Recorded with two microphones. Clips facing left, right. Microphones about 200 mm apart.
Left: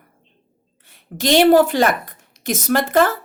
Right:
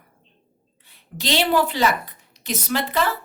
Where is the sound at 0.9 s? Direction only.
50° left (ahead or behind).